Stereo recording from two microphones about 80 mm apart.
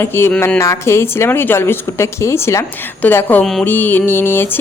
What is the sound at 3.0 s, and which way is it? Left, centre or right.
Speech, left.